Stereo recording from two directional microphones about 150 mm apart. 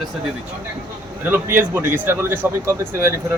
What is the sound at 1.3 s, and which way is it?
Speech, 15° right (ahead or behind).